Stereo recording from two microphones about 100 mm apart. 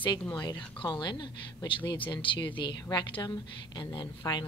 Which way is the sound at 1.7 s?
60° left (ahead or behind).